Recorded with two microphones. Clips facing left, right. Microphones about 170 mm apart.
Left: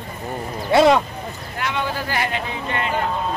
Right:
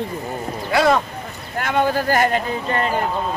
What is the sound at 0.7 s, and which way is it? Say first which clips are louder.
Speech: left 3 dB; 20° left (ahead or behind).